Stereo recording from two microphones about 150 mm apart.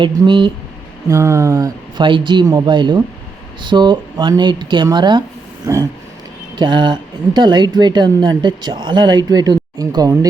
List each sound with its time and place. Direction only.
0.0 s speech: 35° right (ahead or behind)
1.0 s a woman's voice: 20° right (ahead or behind)